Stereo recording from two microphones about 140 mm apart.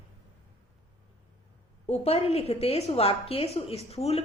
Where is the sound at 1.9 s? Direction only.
45° left (ahead or behind).